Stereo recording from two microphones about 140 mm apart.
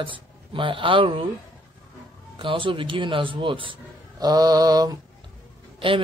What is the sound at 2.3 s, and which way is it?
Speech, 40° right (ahead or behind).